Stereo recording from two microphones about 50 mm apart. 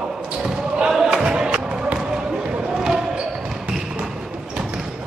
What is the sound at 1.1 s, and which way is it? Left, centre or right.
Music, centre.